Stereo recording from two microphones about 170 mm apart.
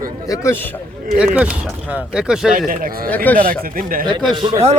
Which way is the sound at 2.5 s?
55° right (ahead or behind).